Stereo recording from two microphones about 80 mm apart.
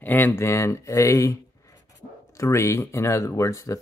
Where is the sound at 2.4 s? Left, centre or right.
Left.